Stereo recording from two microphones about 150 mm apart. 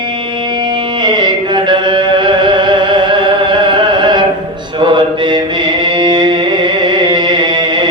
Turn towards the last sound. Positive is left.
turn(degrees=-30)  # may be behind; listen again after turning